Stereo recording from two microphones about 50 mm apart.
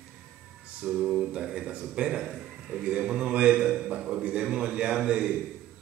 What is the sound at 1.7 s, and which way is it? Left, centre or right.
Speech, right.